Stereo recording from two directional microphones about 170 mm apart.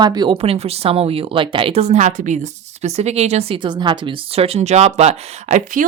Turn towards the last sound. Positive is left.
turn(degrees=-45)  # may be behind; listen again after turning